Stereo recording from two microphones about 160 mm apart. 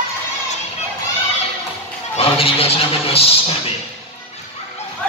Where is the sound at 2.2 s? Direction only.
35° left (ahead or behind).